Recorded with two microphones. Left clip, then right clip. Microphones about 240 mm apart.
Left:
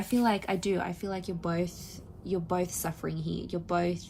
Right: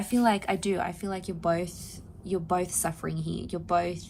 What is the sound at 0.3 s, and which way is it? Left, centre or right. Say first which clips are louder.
A woman's voice: right 4 dB; right.